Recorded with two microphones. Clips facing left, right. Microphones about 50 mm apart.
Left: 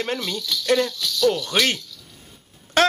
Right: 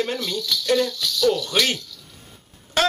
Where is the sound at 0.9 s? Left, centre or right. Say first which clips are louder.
Even; centre.